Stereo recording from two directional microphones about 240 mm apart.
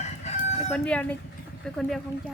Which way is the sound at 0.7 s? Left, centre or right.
Centre.